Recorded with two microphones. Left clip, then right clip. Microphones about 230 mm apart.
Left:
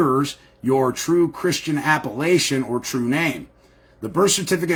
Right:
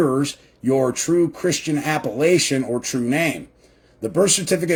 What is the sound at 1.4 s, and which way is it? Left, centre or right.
Speech, left.